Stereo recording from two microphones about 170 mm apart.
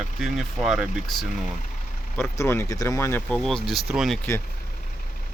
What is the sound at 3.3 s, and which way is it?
Speech, centre (ahead or behind).